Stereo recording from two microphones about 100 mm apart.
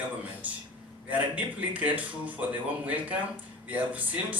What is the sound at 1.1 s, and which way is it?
Speech, 15° right (ahead or behind).